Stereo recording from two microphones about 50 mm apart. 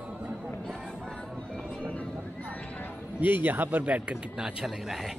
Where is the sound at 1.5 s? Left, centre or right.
Left.